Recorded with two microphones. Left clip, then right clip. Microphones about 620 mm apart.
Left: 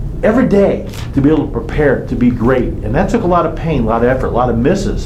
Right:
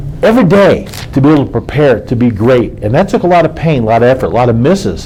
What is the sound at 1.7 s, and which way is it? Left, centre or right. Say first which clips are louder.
A man's voice: right 4 dB; right.